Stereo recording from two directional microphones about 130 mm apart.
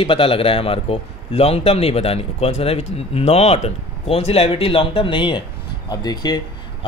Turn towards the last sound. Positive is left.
turn(degrees=30)  # may be behind; listen again after turning